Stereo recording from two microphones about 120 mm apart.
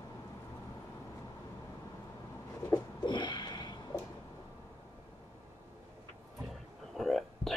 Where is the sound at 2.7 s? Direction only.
40° left (ahead or behind).